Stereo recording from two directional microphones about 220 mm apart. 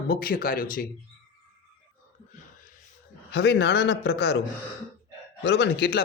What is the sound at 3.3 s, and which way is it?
Speech, 50° left (ahead or behind).